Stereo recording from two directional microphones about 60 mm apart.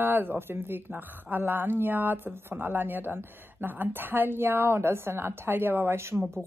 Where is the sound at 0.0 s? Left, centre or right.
Right.